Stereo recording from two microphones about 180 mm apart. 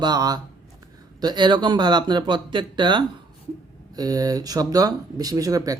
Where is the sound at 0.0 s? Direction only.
20° right (ahead or behind).